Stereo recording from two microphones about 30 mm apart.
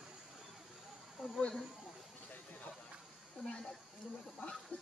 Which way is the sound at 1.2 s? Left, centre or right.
Centre.